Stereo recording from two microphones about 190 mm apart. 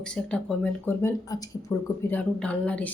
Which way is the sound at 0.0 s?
5° left (ahead or behind).